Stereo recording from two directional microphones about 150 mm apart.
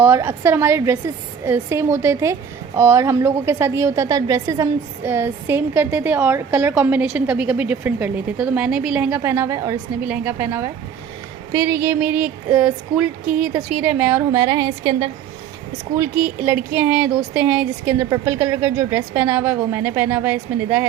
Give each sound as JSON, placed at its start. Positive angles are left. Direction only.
{"t": 0.0, "sound": "a woman's voice", "side_deg": -20}
{"t": 16.0, "sound": "a woman's voice", "side_deg": -15}